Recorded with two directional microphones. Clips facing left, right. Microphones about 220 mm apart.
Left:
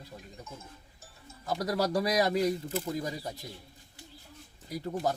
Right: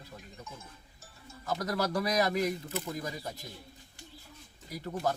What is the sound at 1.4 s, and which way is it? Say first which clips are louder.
A man's voice: left 2 dB; 15° left (ahead or behind).